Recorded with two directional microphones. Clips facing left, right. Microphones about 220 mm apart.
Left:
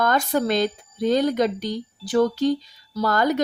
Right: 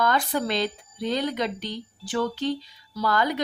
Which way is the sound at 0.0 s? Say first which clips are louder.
Left 3 dB; 45° left (ahead or behind).